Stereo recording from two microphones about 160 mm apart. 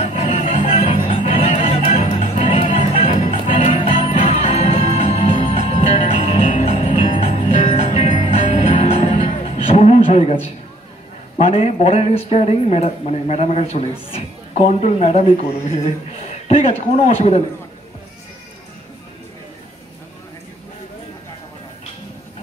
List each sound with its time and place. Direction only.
0.0 s music: 40° left (ahead or behind)
3.5 s music: 50° left (ahead or behind)
3.8 s music: 35° left (ahead or behind)
6.7 s music: 50° left (ahead or behind)
7.6 s music: 35° left (ahead or behind)
8.3 s music: 35° left (ahead or behind)
11.3 s a woman's voice: 40° left (ahead or behind)